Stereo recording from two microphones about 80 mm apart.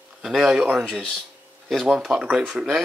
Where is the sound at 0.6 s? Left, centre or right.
Right.